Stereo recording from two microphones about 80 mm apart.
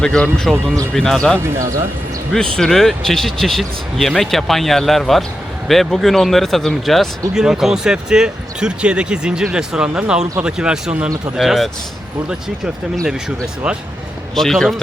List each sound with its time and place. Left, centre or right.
0.0 s speech: centre
1.4 s speech: right
2.3 s speech: centre
13.6 s speech: centre
14.3 s speech: centre